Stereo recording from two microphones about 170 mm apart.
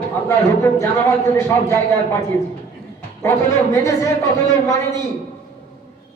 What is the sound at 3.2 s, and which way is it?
Speech, 15° left (ahead or behind).